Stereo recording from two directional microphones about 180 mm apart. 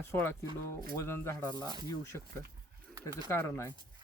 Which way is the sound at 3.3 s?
15° left (ahead or behind).